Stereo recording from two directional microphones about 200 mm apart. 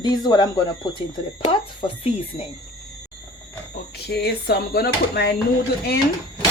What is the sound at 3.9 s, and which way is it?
Speech, 55° left (ahead or behind).